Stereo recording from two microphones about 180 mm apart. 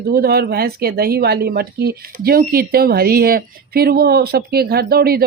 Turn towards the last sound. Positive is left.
turn(degrees=-60)  # may be behind; listen again after turning